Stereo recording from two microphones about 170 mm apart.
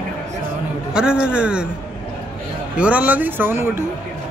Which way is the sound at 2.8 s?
10° right (ahead or behind).